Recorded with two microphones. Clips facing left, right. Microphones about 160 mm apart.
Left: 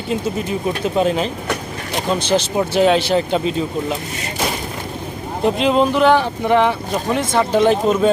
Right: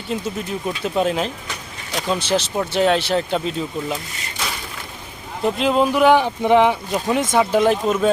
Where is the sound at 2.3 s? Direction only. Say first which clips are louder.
Left 5 dB; centre (ahead or behind).